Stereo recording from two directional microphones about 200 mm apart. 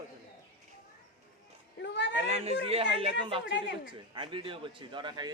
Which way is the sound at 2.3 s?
30° right (ahead or behind).